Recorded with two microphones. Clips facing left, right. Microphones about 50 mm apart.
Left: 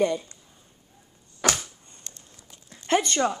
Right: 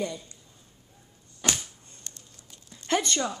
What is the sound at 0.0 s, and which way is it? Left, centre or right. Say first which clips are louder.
Speech: left 9 dB; left.